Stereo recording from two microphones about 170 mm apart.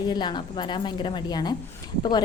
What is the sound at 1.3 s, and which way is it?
Speech, 25° left (ahead or behind).